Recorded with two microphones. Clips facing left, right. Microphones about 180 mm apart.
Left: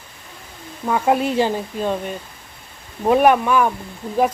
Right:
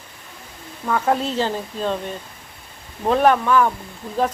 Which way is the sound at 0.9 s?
15° left (ahead or behind).